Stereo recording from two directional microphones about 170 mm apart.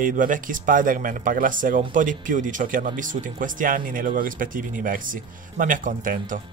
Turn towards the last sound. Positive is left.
turn(degrees=-50)  # may be behind; listen again after turning